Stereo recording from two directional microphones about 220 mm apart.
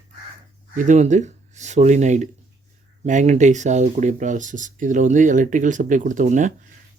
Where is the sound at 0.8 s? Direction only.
35° right (ahead or behind).